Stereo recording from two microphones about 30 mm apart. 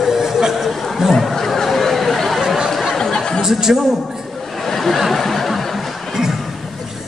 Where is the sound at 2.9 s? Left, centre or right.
Centre.